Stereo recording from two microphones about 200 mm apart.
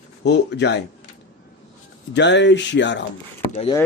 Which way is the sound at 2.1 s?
60° left (ahead or behind).